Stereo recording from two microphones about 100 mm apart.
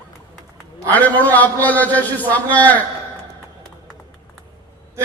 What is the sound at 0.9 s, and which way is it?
A man's voice, 15° left (ahead or behind).